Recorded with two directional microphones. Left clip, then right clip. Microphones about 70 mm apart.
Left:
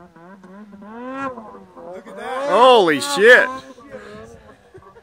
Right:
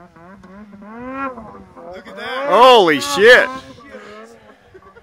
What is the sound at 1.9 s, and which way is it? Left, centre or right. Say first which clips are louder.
Cattle: right 2 dB; left.